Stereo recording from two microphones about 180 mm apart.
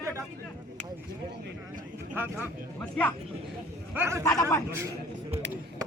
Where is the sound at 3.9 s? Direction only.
15° right (ahead or behind).